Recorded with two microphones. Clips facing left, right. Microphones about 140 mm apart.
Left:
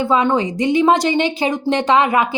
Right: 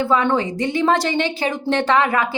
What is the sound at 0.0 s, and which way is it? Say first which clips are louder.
Speech: left 2 dB; 20° left (ahead or behind).